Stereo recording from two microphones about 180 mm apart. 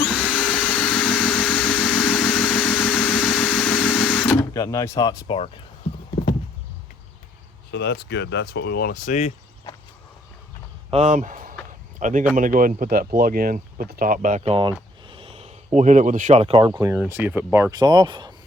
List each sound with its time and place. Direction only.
0.1 s a sound: 5° right (ahead or behind)
1.9 s vehicle: 5° right (ahead or behind)
4.4 s speech: 15° left (ahead or behind)
7.7 s speech: 70° left (ahead or behind); by 9.3 s 45° left (ahead or behind)
10.9 s speech: 45° right (ahead or behind); by 18.3 s 25° right (ahead or behind)